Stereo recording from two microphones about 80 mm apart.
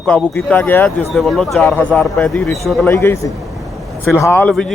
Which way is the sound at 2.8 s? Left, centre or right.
Left.